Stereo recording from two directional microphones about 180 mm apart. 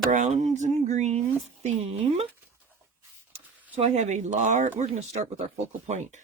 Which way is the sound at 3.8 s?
40° right (ahead or behind).